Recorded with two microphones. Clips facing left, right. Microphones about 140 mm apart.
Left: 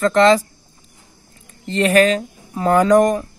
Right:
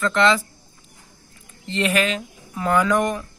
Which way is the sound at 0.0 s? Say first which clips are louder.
Left 6 dB; 40° left (ahead or behind).